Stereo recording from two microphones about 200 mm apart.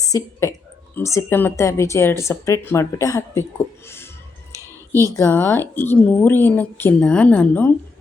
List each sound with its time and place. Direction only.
0.0 s a woman's voice: 15° left (ahead or behind)
3.8 s music: 10° left (ahead or behind)
5.1 s speech: 10° left (ahead or behind)